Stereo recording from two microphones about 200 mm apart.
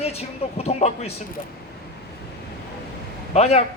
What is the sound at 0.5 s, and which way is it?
Speech, 30° left (ahead or behind).